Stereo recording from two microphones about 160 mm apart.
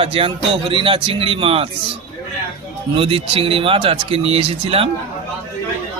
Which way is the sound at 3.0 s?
35° right (ahead or behind).